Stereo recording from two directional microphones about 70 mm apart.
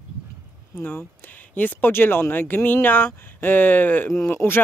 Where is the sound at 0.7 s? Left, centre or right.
Left.